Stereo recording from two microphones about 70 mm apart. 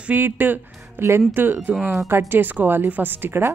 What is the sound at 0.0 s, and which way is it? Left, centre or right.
Speech, right.